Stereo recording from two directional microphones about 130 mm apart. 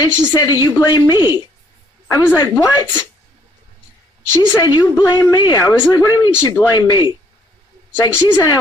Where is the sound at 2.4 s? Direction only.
25° left (ahead or behind).